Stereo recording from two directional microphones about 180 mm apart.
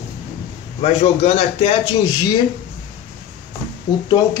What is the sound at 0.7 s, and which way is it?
A man's voice, 35° left (ahead or behind).